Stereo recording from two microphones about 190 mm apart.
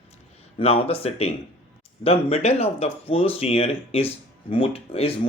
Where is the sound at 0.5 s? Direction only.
30° left (ahead or behind).